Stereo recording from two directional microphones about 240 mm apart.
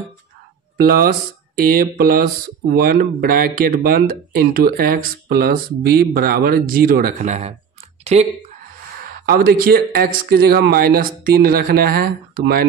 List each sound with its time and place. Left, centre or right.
0.7 s speech: right